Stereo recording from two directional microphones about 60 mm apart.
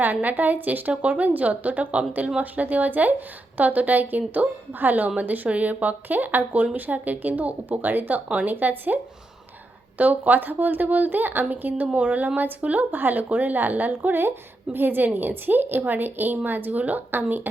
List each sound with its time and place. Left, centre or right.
0.0 s a woman's voice: right
10.0 s speech: right